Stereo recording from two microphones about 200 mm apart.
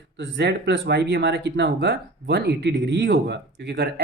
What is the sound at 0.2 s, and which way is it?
Speech, 60° right (ahead or behind).